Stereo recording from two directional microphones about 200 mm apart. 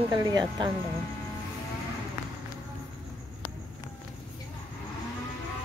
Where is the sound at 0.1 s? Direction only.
20° right (ahead or behind).